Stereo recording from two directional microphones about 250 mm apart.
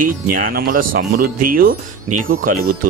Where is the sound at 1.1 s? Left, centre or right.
Right.